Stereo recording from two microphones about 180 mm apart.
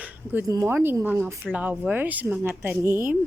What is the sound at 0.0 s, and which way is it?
A woman's voice, 10° right (ahead or behind).